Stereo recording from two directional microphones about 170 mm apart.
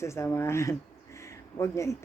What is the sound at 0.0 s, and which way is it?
A woman's voice, 15° left (ahead or behind).